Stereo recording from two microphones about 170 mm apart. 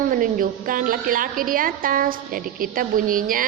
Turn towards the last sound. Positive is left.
turn(degrees=-55)  # may be behind; listen again after turning